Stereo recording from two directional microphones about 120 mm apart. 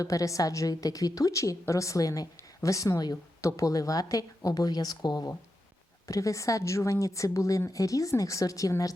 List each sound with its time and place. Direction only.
0.0 s a woman's voice: 30° left (ahead or behind)